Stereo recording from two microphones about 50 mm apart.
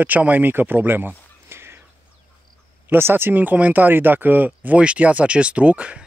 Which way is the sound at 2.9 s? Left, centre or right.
Right.